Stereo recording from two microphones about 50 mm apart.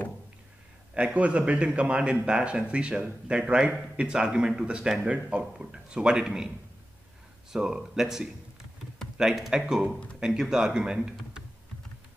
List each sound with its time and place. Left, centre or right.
0.9 s speech: right
7.5 s speech: centre